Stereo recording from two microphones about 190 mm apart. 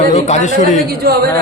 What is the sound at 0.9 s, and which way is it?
Speech, 55° right (ahead or behind).